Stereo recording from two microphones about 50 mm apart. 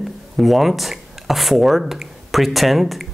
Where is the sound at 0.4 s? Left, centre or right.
Centre.